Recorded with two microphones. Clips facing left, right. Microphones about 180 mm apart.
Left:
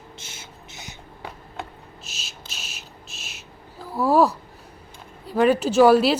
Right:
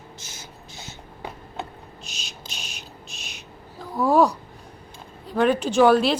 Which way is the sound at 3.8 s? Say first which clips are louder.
Even; 5° left (ahead or behind).